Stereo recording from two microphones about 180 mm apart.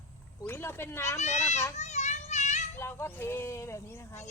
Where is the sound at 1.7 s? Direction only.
40° left (ahead or behind).